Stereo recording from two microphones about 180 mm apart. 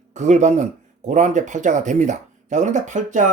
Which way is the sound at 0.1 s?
40° right (ahead or behind).